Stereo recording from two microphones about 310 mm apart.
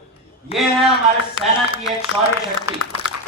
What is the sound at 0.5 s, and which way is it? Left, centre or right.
Speech, centre.